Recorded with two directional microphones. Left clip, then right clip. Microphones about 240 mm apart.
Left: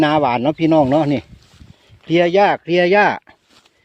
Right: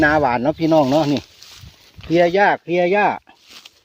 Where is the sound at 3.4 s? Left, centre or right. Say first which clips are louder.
Right 10 dB; right.